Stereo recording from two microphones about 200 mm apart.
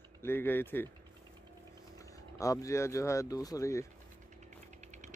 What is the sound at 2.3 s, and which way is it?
Speech, 15° left (ahead or behind).